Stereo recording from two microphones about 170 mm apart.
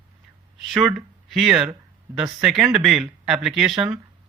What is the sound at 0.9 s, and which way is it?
Speech, centre (ahead or behind).